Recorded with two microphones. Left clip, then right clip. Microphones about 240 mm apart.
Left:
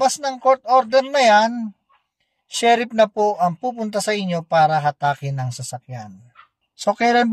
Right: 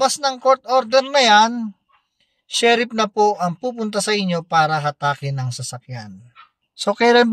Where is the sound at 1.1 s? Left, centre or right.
Centre.